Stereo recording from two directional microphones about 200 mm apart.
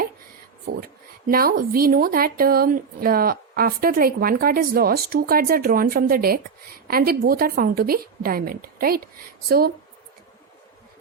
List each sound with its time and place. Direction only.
1.3 s a woman's voice: 45° right (ahead or behind)